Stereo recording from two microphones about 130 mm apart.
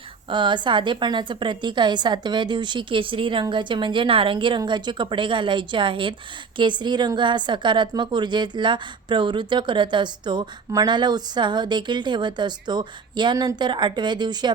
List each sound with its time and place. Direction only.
0.3 s speech: 40° right (ahead or behind)